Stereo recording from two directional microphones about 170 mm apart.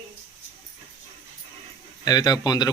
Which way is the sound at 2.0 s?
25° left (ahead or behind).